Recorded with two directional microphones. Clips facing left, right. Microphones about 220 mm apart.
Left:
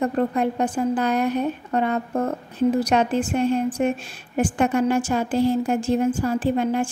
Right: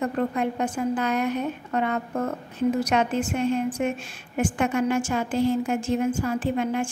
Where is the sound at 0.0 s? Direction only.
35° left (ahead or behind).